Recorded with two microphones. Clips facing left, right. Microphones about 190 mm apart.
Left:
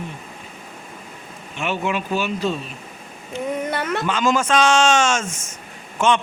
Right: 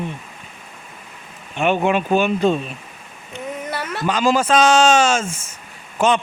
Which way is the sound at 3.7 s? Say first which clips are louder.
Left 3 dB; 5° right (ahead or behind).